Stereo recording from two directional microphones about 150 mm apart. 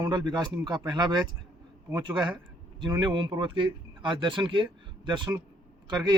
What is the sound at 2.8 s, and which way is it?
Speech, 30° right (ahead or behind).